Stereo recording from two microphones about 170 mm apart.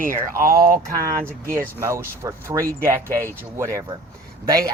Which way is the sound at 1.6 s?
15° right (ahead or behind).